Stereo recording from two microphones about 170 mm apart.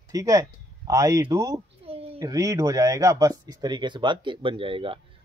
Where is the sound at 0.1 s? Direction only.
20° right (ahead or behind).